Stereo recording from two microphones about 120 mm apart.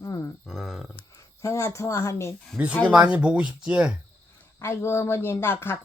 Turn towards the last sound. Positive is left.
turn(degrees=20)  # may be behind; listen again after turning